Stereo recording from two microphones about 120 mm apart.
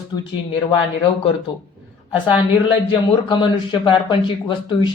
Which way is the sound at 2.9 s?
40° left (ahead or behind).